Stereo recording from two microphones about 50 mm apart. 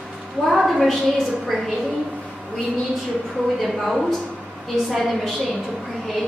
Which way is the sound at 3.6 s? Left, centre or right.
Centre.